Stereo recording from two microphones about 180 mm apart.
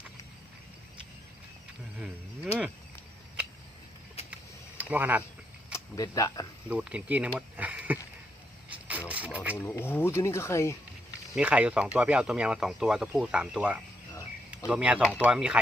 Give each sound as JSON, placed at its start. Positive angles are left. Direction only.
{"t": 4.8, "sound": "speech", "side_deg": -10}
{"t": 5.7, "sound": "speech", "side_deg": 20}
{"t": 6.7, "sound": "speech", "side_deg": -5}
{"t": 8.9, "sound": "mechanisms", "side_deg": -10}
{"t": 9.6, "sound": "speech", "side_deg": 15}
{"t": 11.3, "sound": "speech", "side_deg": -5}
{"t": 14.1, "sound": "a sound", "side_deg": 20}
{"t": 14.7, "sound": "speech", "side_deg": -5}